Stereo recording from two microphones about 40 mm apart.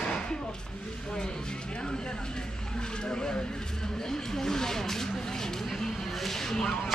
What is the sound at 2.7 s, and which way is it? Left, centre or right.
A woman's voice, left.